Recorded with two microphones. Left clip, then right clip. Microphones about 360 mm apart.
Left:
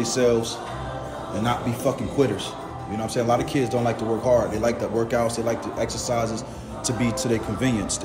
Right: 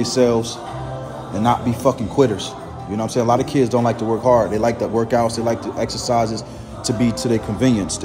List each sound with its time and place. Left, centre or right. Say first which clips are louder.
0.0 s speech: right 4 dB; centre